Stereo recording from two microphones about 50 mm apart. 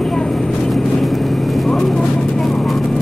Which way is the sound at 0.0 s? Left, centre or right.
Centre.